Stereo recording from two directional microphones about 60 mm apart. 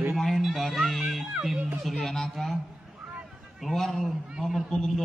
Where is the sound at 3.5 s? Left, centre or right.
Centre.